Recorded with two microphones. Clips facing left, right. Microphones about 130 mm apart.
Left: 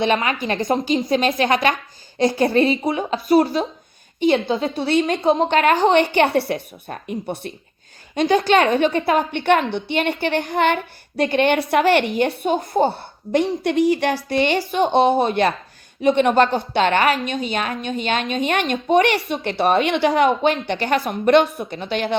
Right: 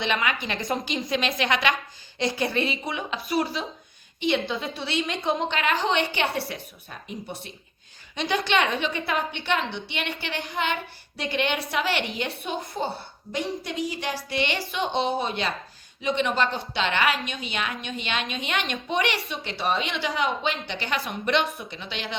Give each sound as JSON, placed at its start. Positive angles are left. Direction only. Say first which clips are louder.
{"t": 0.0, "sound": "a woman's voice", "louder": "left 7 dB", "side_deg": 40}
{"t": 4.4, "sound": "a woman's voice", "louder": "left 9 dB", "side_deg": 25}
{"t": 4.7, "sound": "a woman's voice", "louder": "left 10 dB", "side_deg": 50}
{"t": 8.1, "sound": "a woman's voice", "louder": "left 9 dB", "side_deg": 45}
{"t": 14.3, "sound": "a woman's voice", "louder": "left 9 dB", "side_deg": 40}